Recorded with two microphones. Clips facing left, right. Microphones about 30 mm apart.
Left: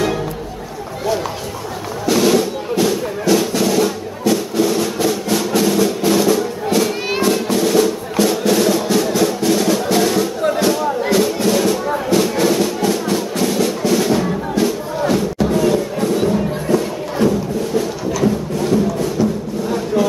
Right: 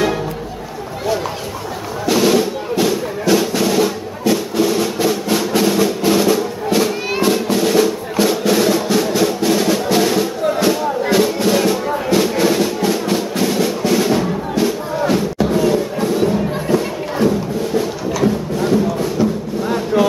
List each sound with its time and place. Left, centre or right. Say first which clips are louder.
2.0 s music: even; centre
17.7 s a sound: right 1 dB; centre
19.7 s vehicle: right 2 dB; right